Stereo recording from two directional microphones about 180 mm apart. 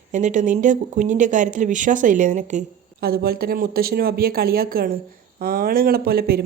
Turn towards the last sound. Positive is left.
turn(degrees=-60)  # may be behind; listen again after turning